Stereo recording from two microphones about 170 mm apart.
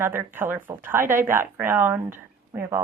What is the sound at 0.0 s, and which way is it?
Speech, 15° right (ahead or behind).